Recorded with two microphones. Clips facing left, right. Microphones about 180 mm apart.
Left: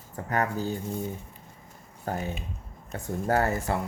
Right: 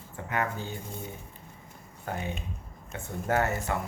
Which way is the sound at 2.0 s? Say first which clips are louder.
Left 3 dB; 40° left (ahead or behind).